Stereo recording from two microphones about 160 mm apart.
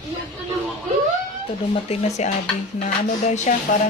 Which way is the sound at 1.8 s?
45° left (ahead or behind).